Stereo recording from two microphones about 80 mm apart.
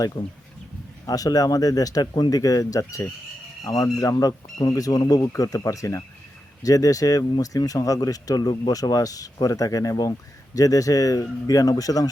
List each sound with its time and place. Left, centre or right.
1.0 s speech: left